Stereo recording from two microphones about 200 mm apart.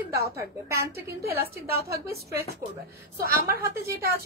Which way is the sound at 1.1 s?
50° right (ahead or behind).